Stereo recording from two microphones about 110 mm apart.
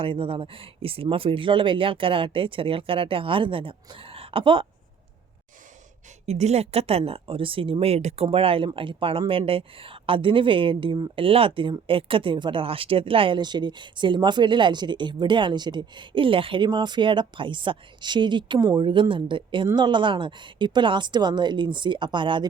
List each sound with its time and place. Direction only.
0.0 s speech: 55° right (ahead or behind)
6.2 s speech: 80° right; by 22.4 s 45° right (ahead or behind)